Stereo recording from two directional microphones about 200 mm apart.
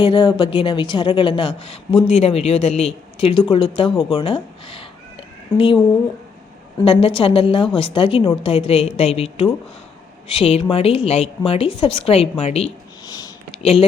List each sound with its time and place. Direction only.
0.0 s a woman's voice: 25° left (ahead or behind)
6.8 s a woman's voice: 30° left (ahead or behind)
13.1 s a sound: 20° left (ahead or behind)